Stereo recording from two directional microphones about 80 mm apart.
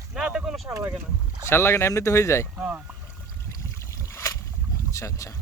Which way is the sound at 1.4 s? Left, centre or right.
Left.